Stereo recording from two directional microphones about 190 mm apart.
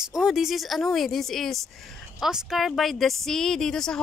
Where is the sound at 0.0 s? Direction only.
5° right (ahead or behind).